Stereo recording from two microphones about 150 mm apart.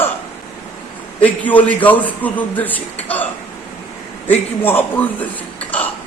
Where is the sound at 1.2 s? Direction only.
10° left (ahead or behind).